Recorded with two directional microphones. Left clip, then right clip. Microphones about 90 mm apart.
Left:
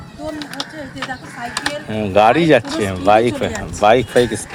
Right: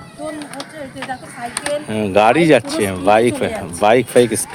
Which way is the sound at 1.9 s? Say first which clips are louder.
Left 1 dB; 90° right.